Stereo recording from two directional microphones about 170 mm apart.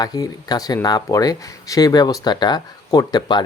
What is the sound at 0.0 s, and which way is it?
Speech, 20° left (ahead or behind).